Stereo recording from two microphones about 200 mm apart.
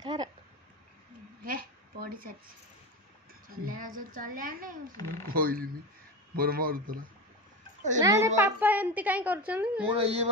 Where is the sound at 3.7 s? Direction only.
45° right (ahead or behind).